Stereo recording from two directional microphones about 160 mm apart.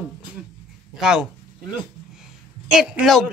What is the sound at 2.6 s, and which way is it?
Speech, 5° right (ahead or behind).